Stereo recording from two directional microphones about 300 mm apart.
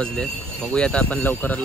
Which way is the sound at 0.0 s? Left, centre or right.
Centre.